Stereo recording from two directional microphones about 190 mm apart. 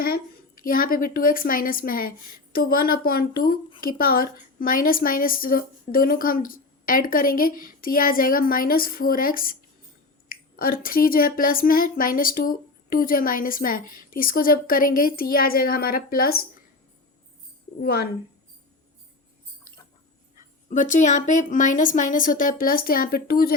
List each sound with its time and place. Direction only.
0.0 s speech: 50° left (ahead or behind)
10.6 s speech: 50° left (ahead or behind)
17.8 s speech: 55° left (ahead or behind)
20.7 s speech: 40° left (ahead or behind)